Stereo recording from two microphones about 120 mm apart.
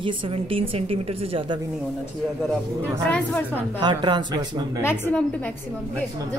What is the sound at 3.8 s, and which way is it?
Speech, 40° right (ahead or behind).